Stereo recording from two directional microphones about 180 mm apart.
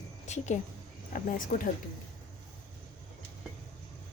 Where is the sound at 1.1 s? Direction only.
50° left (ahead or behind).